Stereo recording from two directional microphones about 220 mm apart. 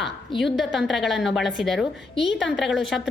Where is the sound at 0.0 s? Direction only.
Centre (ahead or behind).